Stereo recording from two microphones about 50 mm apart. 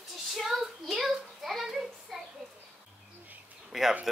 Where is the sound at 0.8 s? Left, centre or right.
Centre.